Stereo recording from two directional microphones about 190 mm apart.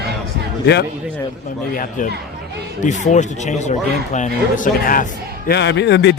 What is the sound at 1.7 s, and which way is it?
Speech, 45° left (ahead or behind).